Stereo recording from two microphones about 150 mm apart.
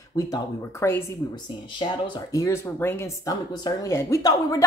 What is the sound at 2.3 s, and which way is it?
Speech, 20° left (ahead or behind).